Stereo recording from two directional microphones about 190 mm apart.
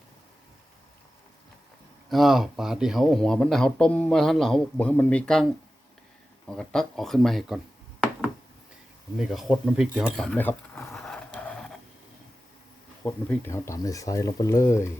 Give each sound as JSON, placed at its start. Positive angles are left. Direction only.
{"t": 2.0, "sound": "speech", "side_deg": 0}
{"t": 6.5, "sound": "speech", "side_deg": 5}
{"t": 9.1, "sound": "cutlery", "side_deg": 0}
{"t": 13.1, "sound": "speech", "side_deg": 15}